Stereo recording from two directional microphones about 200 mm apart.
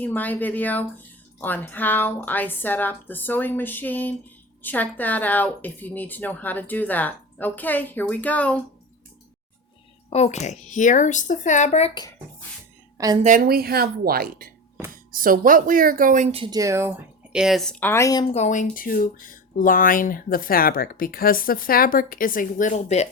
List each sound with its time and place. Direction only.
0.0 s speech: 10° left (ahead or behind)
10.1 s speech: 35° left (ahead or behind)
13.2 s speech: 45° right (ahead or behind); by 16.9 s 15° right (ahead or behind)
17.3 s speech: centre (ahead or behind); by 18.3 s 15° left (ahead or behind)
18.3 s speech: 35° left (ahead or behind)